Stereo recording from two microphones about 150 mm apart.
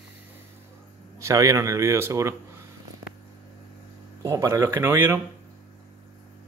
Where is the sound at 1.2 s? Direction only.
20° right (ahead or behind).